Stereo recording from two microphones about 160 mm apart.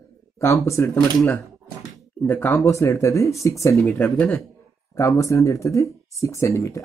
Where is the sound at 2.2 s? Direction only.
10° left (ahead or behind).